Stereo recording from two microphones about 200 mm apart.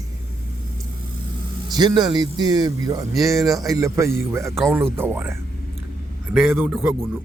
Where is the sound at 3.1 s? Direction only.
Centre (ahead or behind).